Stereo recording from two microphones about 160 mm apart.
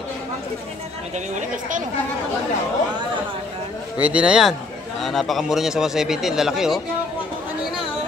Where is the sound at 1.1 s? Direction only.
50° right (ahead or behind).